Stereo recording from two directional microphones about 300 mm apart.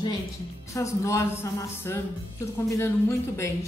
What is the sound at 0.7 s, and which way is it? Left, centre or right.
A woman's voice, centre.